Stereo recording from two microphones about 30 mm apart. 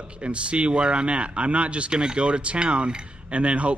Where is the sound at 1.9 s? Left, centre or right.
Right.